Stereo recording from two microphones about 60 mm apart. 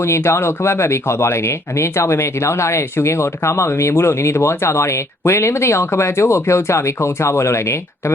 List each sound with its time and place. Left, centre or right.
0.0 s speech: left